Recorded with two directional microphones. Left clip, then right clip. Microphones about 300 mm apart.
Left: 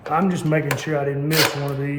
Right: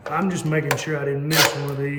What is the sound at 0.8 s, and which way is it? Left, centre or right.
Chopping, centre.